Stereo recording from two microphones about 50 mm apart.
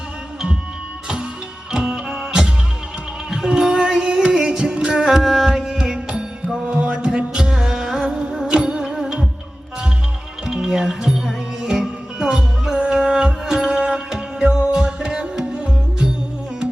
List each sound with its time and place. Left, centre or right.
1.7 s music: centre
10.4 s music: centre